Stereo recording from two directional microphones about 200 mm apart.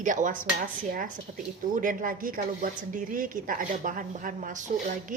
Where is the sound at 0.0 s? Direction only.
40° right (ahead or behind).